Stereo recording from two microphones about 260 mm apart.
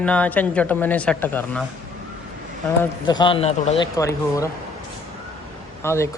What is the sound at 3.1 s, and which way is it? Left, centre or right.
Speech, centre.